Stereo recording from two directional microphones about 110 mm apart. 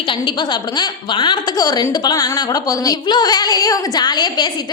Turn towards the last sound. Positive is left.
turn(degrees=40)  # may be behind; listen again after turning